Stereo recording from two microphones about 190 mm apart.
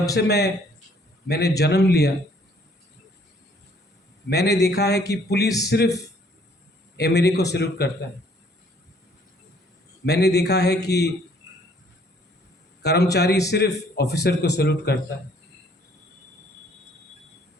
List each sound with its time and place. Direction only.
0.1 s a man's voice: 60° left (ahead or behind)
4.3 s a man's voice: 60° left (ahead or behind)
7.0 s a man's voice: 60° left (ahead or behind)
10.1 s a man's voice: 60° left (ahead or behind)
11.4 s a sound: 15° right (ahead or behind)
12.8 s a man's voice: 60° left (ahead or behind)